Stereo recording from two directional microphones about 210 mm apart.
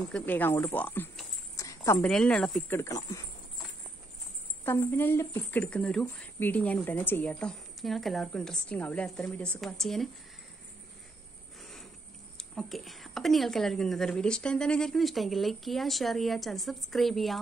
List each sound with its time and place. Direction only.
0.1 s speech: 10° left (ahead or behind)
2.8 s speech: 15° left (ahead or behind)
4.6 s a woman's voice: 10° left (ahead or behind)
11.6 s a sound: centre (ahead or behind)
12.4 s a woman's voice: centre (ahead or behind)